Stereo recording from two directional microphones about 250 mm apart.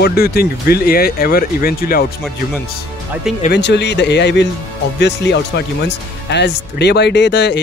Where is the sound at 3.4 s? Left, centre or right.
Left.